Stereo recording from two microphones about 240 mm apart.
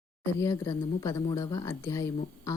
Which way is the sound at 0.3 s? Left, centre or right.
Centre.